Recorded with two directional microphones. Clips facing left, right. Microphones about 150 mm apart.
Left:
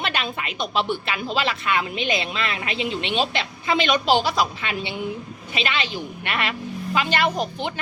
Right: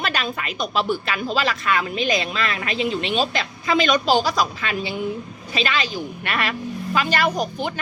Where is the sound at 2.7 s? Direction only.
40° right (ahead or behind).